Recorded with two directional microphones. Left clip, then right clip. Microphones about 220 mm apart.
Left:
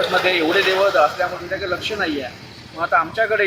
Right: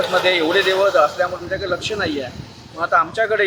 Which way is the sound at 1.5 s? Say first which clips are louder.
Right 1 dB; 5° right (ahead or behind).